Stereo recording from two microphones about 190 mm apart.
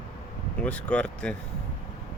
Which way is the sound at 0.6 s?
5° left (ahead or behind).